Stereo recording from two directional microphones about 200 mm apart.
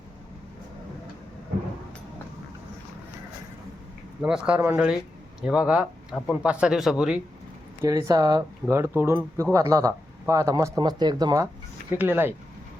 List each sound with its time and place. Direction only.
4.2 s speech: 5° right (ahead or behind)
7.8 s speech: 15° right (ahead or behind)